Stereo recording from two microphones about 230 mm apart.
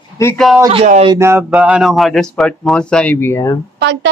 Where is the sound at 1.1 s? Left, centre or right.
Centre.